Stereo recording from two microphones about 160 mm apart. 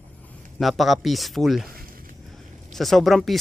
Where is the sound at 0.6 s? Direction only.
Centre (ahead or behind).